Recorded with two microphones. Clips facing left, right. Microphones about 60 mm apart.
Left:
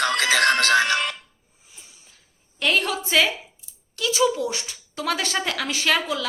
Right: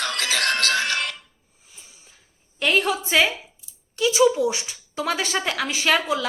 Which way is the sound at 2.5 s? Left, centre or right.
Centre.